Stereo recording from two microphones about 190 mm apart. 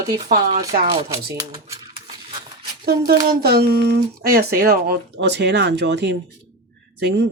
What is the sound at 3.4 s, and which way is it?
Speech, 55° right (ahead or behind).